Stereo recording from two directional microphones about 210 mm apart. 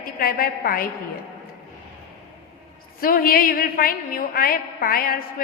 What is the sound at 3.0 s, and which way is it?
A woman's voice, 45° left (ahead or behind).